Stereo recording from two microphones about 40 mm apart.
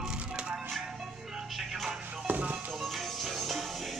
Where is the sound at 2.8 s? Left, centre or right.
Centre.